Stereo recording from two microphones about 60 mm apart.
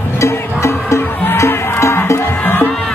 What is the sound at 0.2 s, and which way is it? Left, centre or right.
Music, left.